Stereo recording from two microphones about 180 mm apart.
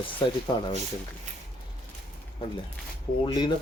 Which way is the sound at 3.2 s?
25° left (ahead or behind).